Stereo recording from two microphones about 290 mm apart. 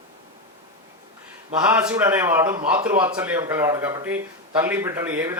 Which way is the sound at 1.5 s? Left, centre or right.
Centre.